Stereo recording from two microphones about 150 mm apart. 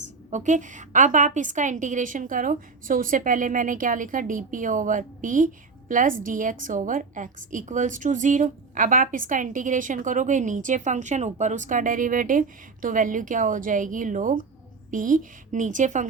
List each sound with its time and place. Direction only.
0.3 s a woman's voice: 55° right (ahead or behind)